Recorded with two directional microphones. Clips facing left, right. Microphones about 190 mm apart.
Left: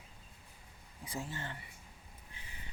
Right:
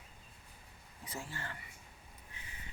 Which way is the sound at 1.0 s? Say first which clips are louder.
Left 3 dB; 15° left (ahead or behind).